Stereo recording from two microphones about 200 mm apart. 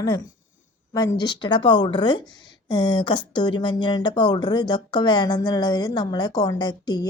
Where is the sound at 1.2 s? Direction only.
20° left (ahead or behind).